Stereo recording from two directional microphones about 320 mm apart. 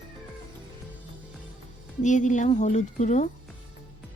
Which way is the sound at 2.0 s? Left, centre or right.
Left.